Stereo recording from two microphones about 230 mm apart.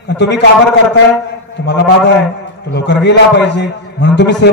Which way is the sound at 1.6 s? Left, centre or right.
Left.